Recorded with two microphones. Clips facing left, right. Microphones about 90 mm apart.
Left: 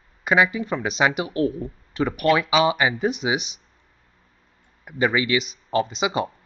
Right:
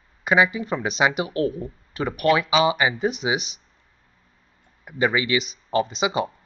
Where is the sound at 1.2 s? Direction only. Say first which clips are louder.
Left 1 dB; 25° left (ahead or behind).